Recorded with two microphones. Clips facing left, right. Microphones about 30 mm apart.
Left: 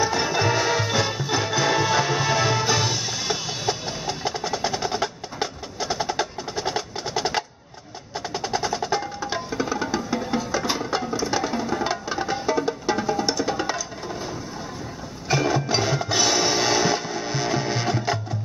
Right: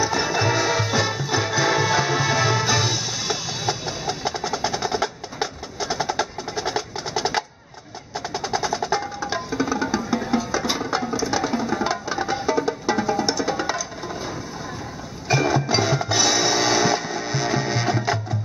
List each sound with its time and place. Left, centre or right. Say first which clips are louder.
0.1 s music: right 1 dB; centre
15.2 s music: right 2 dB; centre